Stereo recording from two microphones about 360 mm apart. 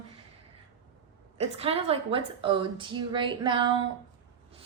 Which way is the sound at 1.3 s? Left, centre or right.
Centre.